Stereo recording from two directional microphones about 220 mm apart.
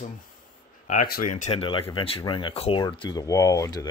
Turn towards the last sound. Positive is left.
turn(degrees=15)  # may be behind; listen again after turning